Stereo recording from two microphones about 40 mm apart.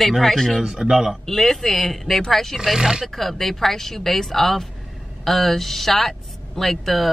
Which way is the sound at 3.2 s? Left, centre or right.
Centre.